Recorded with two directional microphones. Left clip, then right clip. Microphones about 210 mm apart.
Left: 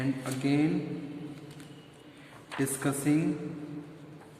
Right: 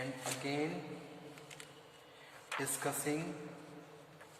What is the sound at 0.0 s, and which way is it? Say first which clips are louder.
Speech: left 8 dB; 20° left (ahead or behind).